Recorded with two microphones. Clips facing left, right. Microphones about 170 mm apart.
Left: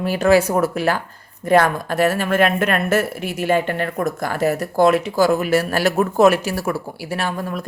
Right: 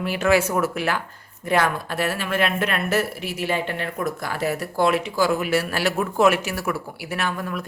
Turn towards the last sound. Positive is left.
turn(degrees=35)  # may be behind; listen again after turning